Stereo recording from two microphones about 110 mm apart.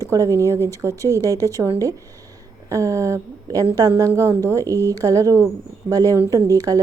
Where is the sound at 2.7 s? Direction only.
30° right (ahead or behind).